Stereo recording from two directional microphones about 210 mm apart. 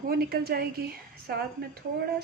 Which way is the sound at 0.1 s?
45° right (ahead or behind).